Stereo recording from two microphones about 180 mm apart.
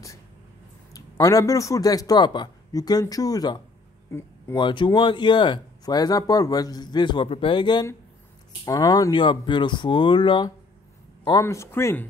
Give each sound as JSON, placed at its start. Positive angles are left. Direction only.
{"t": 0.9, "sound": "speech", "side_deg": 20}
{"t": 4.6, "sound": "speech", "side_deg": 25}